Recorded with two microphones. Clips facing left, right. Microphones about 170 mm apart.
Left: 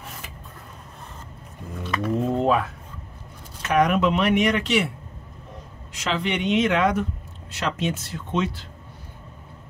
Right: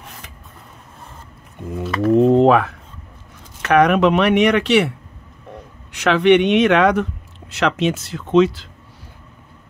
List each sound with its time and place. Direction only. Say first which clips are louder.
2.0 s a sound: right 10 dB; 80° right
3.6 s speech: right 6 dB; 70° right (ahead or behind)
5.9 s speech: right 13 dB; 70° right (ahead or behind); by 8.6 s 90° right